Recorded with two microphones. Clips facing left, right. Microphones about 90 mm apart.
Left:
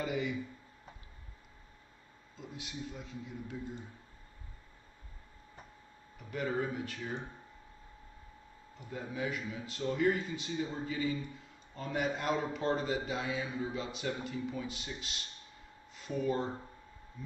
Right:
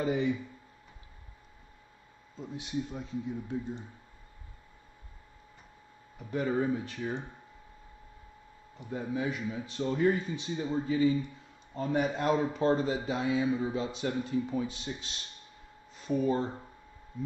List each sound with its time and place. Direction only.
0.0 s speech: 30° right (ahead or behind)
2.3 s speech: 30° right (ahead or behind)
6.1 s speech: 30° right (ahead or behind)
8.7 s speech: 30° right (ahead or behind)
16.0 s speech: 30° right (ahead or behind)